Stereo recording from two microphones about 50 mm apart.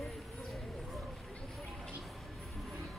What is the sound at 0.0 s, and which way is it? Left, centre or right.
Bird, centre.